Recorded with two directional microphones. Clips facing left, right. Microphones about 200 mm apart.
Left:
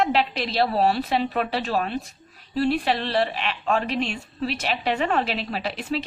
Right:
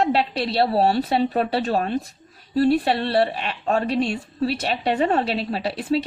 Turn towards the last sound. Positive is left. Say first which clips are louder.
# right 5 dB
turn(degrees=-30)  # may be behind; listen again after turning